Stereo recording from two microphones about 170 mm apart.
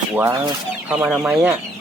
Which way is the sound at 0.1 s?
15° right (ahead or behind).